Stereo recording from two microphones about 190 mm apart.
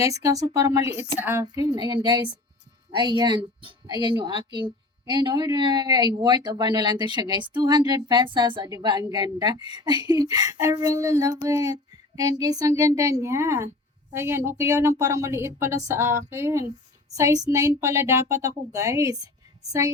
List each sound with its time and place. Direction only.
0.0 s child singing: 15° right (ahead or behind)
2.9 s a woman's voice: 25° right (ahead or behind)
11.0 s child singing: 20° right (ahead or behind)